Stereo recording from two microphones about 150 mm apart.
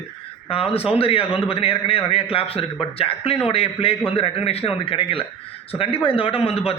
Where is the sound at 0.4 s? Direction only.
40° left (ahead or behind).